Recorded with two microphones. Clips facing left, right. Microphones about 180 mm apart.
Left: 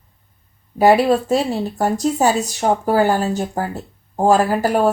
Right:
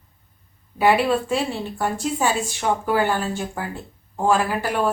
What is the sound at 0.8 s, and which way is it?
Speech, 40° left (ahead or behind).